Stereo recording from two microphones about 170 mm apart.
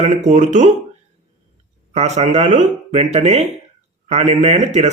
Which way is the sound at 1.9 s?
40° right (ahead or behind).